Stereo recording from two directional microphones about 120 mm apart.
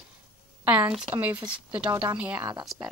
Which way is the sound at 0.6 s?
15° right (ahead or behind).